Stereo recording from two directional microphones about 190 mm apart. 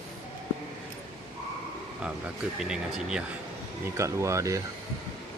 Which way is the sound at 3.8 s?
15° right (ahead or behind).